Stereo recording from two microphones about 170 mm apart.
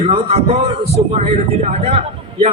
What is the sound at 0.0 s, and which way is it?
A man's voice, 40° right (ahead or behind).